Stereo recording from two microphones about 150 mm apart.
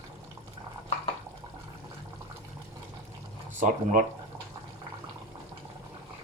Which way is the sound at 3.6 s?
65° right (ahead or behind).